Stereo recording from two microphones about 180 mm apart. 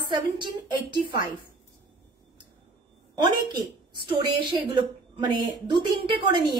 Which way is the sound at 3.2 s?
25° right (ahead or behind).